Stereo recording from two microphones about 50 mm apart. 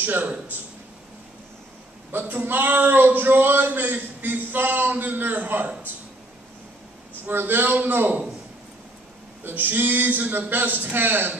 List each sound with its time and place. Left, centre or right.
0.0 s a man's voice: right
2.1 s a man's voice: right
7.2 s a man's voice: right
9.4 s a man's voice: right